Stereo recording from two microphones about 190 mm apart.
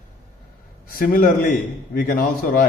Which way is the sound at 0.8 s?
50° left (ahead or behind).